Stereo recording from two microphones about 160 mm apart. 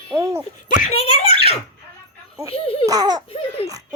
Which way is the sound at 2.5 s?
40° left (ahead or behind).